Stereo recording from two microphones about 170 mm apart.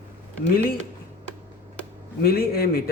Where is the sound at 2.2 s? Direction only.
65° left (ahead or behind).